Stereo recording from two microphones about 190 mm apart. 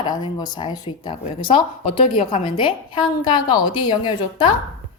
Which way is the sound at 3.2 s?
20° left (ahead or behind).